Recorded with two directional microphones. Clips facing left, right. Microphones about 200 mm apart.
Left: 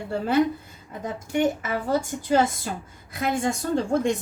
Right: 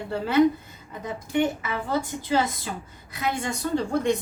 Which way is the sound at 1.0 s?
45° left (ahead or behind).